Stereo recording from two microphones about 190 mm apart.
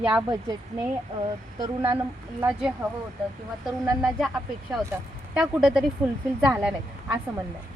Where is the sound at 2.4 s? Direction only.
5° right (ahead or behind).